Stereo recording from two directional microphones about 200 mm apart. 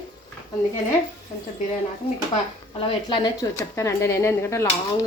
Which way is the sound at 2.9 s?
20° left (ahead or behind).